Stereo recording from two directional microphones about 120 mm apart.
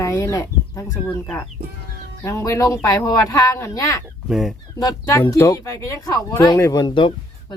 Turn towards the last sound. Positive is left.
turn(degrees=40)  # may be behind; listen again after turning